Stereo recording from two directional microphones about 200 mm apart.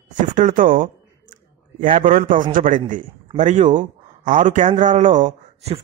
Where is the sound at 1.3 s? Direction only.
40° right (ahead or behind).